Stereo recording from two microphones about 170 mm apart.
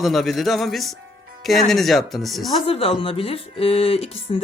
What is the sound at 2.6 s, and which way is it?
Speech, 35° left (ahead or behind).